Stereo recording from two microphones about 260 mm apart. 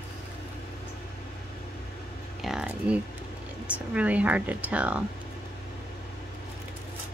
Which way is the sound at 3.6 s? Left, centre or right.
Centre.